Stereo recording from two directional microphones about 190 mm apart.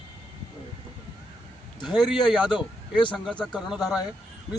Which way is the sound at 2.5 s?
25° left (ahead or behind).